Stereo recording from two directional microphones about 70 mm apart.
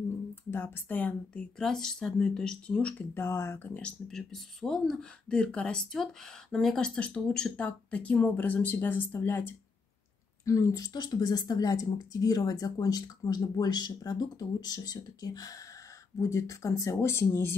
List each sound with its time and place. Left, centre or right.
0.5 s speech: left
1.6 s speech: centre
3.2 s speech: left
3.5 s speech: left
4.1 s speech: centre
5.3 s speech: centre
10.4 s speech: left
10.9 s speech: left
16.2 s speech: left